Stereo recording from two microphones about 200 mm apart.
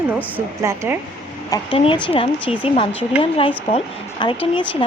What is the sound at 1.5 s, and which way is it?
Speech, 25° left (ahead or behind).